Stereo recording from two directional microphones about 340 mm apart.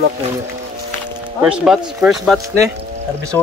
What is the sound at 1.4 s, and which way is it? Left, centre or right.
Speech, centre.